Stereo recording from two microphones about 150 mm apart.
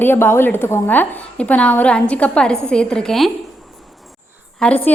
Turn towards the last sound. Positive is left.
turn(degrees=5)  # may be behind; listen again after turning